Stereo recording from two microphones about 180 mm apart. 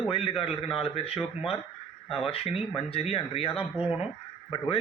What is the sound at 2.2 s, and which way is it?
Speech, 35° left (ahead or behind).